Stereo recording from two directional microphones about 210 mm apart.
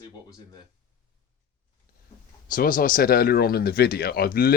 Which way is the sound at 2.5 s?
40° left (ahead or behind).